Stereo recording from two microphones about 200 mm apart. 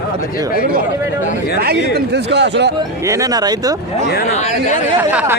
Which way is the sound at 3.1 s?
15° right (ahead or behind).